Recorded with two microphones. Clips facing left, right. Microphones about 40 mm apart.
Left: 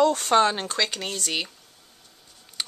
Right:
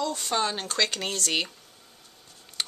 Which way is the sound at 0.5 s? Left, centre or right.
Centre.